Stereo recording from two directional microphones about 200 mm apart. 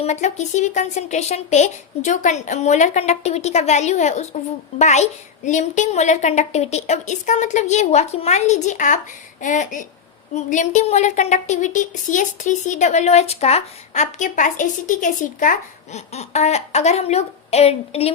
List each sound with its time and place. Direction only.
0.0 s a woman's voice: 35° left (ahead or behind)